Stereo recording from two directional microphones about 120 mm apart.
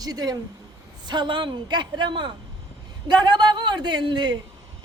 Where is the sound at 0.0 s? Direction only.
30° right (ahead or behind).